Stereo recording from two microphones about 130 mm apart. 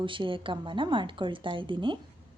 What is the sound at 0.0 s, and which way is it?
A woman's voice, 40° right (ahead or behind).